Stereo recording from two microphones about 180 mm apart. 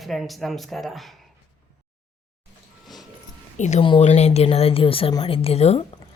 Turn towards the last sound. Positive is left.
turn(degrees=35)  # may be behind; listen again after turning